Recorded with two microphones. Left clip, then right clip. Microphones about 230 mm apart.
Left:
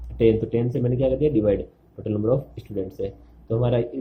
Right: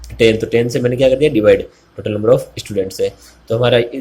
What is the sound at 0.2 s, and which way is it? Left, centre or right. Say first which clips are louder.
Speech: right 8 dB; centre.